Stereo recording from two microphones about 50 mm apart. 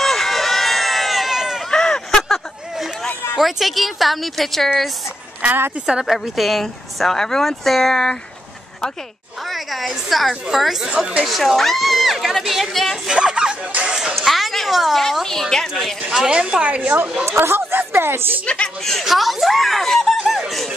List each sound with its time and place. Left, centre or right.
0.0 s run: centre
1.7 s a sound: centre
3.3 s speech: centre
5.9 s a woman's voice: centre
9.4 s a woman's voice: centre
10.9 s a woman's voice: centre
11.2 s speech: centre
13.0 s a sound: centre
14.1 s a woman's voice: centre
16.1 s a woman's voice: centre
16.6 s a woman's voice: right
17.3 s a woman's voice: right
18.4 s speech: left
18.8 s speech: centre